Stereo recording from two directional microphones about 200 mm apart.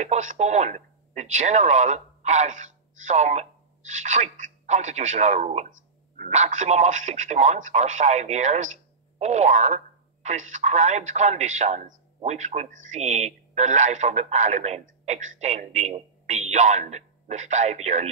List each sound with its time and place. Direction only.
0.0 s speech: 35° right (ahead or behind)